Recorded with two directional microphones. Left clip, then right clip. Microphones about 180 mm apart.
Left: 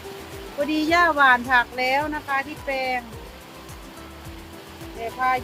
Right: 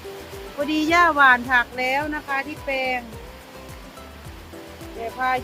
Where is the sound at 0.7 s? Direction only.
10° right (ahead or behind).